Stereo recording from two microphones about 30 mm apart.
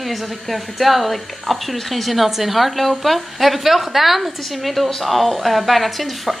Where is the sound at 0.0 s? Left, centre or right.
Centre.